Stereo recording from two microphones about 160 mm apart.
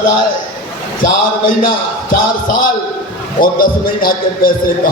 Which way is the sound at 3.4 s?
65° left (ahead or behind).